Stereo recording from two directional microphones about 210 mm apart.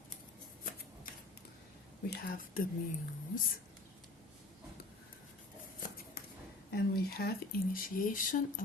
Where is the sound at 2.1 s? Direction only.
45° left (ahead or behind).